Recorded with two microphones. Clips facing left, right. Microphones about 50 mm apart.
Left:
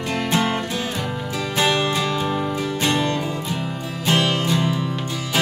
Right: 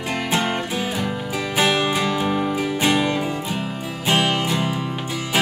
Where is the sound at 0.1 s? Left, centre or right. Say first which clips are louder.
Left 1 dB; centre.